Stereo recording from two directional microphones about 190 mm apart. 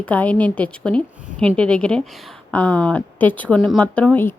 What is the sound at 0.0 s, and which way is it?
A woman's voice, 10° left (ahead or behind).